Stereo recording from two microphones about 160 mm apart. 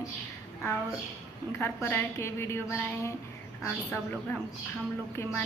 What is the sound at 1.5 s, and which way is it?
A woman's voice, 15° left (ahead or behind).